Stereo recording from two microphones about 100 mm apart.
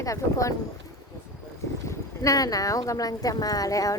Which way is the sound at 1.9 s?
35° left (ahead or behind).